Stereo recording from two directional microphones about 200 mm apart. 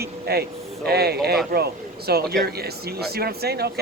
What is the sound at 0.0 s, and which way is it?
A man's voice, 50° right (ahead or behind).